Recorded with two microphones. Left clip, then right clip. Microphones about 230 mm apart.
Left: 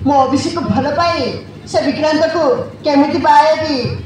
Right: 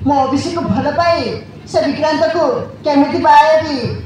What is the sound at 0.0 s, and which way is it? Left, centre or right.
A woman's voice, left.